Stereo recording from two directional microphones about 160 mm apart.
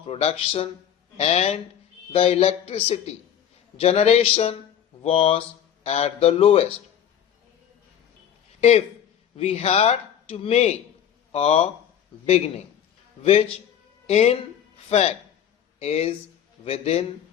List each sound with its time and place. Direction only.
0.1 s a man's voice: 40° left (ahead or behind)
9.3 s speech: 40° left (ahead or behind)
13.2 s a man's voice: 40° left (ahead or behind)